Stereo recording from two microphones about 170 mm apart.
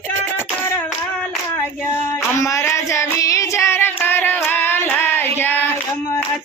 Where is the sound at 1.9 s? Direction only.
15° left (ahead or behind).